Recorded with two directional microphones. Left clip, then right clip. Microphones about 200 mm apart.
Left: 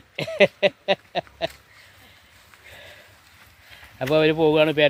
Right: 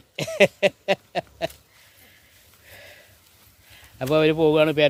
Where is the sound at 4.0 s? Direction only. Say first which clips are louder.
Even; centre (ahead or behind).